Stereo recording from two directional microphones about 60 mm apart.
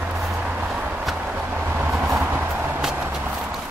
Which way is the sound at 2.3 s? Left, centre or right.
Right.